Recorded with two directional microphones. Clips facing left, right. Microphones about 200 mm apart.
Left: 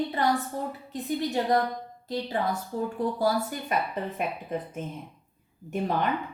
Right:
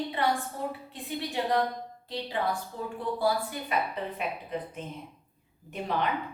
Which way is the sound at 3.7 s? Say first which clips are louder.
Left 2 dB; 45° left (ahead or behind).